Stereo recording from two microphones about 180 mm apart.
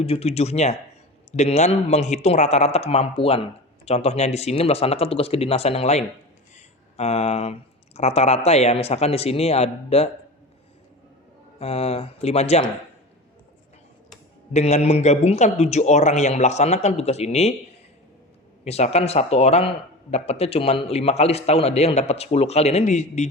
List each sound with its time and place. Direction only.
0.0 s speech: 35° left (ahead or behind)
11.6 s speech: 35° left (ahead or behind)
14.5 s speech: 35° left (ahead or behind)
18.6 s speech: 35° left (ahead or behind)